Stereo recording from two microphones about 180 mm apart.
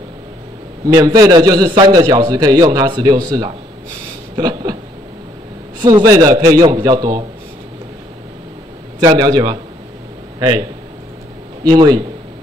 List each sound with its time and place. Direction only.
0.8 s a man's voice: 20° right (ahead or behind)
4.4 s a sound: 25° right (ahead or behind)
5.8 s a man's voice: 25° right (ahead or behind)
9.0 s a man's voice: 20° right (ahead or behind)
11.6 s a man's voice: 20° right (ahead or behind)